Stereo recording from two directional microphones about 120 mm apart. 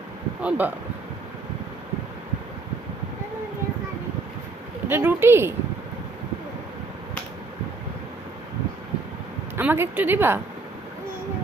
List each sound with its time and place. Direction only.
0.4 s a woman's voice: 15° right (ahead or behind)
4.9 s a woman's voice: 20° right (ahead or behind)
9.6 s a woman's voice: 15° right (ahead or behind)